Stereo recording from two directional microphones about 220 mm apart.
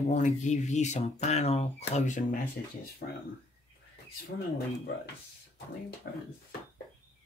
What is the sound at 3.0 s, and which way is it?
Speech, 45° left (ahead or behind).